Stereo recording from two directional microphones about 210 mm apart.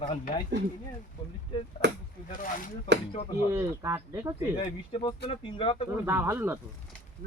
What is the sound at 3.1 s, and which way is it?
Speech, 25° left (ahead or behind).